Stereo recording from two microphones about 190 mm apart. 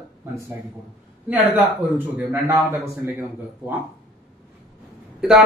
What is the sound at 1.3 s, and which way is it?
Speech, 10° right (ahead or behind).